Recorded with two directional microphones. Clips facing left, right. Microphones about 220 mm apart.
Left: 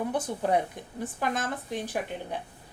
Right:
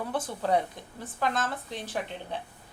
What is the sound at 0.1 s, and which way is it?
A woman's voice, 15° left (ahead or behind).